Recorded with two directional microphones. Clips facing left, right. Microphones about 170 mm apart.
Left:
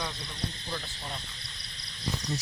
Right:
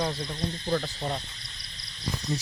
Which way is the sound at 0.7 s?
50° right (ahead or behind).